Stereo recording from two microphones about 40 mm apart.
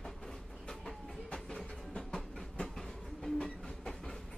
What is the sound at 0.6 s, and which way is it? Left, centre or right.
Train, left.